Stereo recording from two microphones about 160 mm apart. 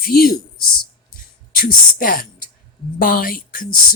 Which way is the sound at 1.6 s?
60° left (ahead or behind).